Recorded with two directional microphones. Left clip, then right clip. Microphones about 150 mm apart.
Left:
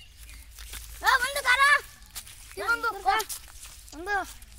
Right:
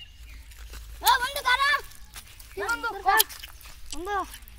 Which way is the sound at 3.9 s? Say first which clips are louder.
Even; 15° left (ahead or behind).